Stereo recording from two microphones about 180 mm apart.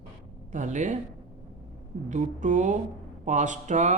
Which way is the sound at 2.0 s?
45° right (ahead or behind).